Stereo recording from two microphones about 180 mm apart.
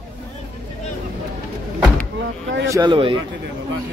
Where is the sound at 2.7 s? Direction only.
25° right (ahead or behind).